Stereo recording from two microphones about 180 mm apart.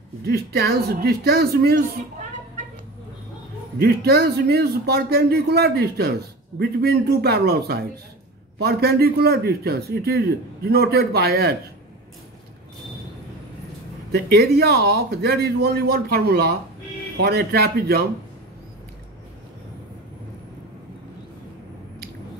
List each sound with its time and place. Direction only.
0.2 s a man's voice: 60° right (ahead or behind)
3.8 s a man's voice: 60° right (ahead or behind)
14.1 s a man's voice: 60° right (ahead or behind)